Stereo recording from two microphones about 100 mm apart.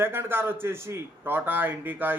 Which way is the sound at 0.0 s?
25° right (ahead or behind).